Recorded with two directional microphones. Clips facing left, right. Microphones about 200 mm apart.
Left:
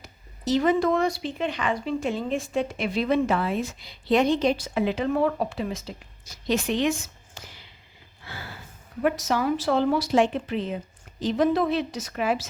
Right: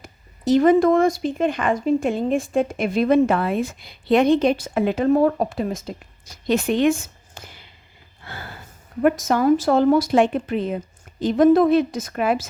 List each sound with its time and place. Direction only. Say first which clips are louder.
0.0 s a woman's voice: right 6 dB; 50° right (ahead or behind)
8.2 s a sound: right 3 dB; 55° right (ahead or behind)
9.0 s speech: right 6 dB; 50° right (ahead or behind)